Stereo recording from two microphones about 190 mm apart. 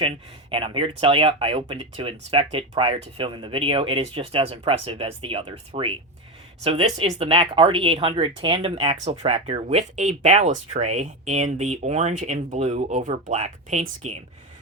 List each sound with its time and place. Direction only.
0.5 s speech: 30° right (ahead or behind)